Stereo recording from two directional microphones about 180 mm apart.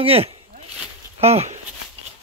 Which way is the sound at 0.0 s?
35° right (ahead or behind).